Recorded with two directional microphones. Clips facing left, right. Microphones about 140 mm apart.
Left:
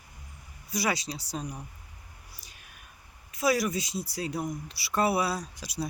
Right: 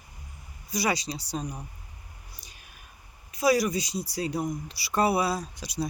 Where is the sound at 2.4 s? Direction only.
Centre (ahead or behind).